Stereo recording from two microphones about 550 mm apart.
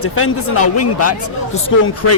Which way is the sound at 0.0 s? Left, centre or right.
Left.